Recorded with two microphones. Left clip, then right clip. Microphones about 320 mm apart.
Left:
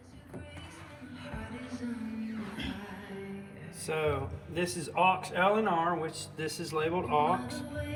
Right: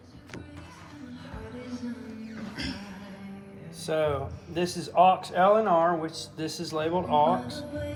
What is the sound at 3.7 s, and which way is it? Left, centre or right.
Speech, right.